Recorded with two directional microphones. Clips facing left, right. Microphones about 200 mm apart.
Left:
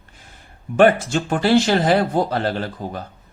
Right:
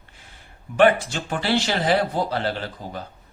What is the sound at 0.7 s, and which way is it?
Speech, 45° left (ahead or behind).